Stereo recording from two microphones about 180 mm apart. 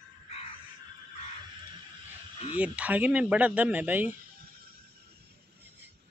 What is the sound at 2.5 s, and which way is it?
Speech, 5° right (ahead or behind).